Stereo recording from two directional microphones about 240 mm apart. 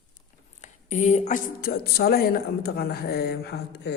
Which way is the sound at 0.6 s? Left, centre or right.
Left.